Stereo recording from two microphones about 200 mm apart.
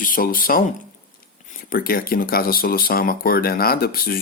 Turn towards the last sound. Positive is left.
turn(degrees=50)  # may be behind; listen again after turning